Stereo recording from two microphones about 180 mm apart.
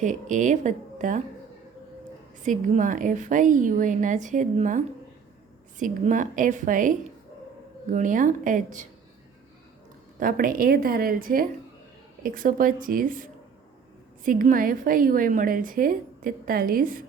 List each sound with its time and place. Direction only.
0.0 s a woman's voice: 45° right (ahead or behind)
2.4 s a woman's voice: 45° right (ahead or behind)
5.8 s a woman's voice: 45° right (ahead or behind)
10.2 s a woman's voice: 50° right (ahead or behind)